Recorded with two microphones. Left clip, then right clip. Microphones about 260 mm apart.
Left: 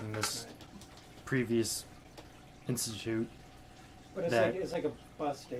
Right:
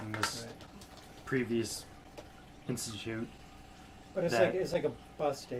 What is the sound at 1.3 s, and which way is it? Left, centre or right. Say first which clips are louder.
Speech: left 1 dB; left.